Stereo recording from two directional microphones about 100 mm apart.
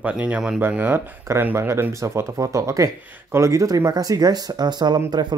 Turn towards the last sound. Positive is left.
turn(degrees=-45)  # may be behind; listen again after turning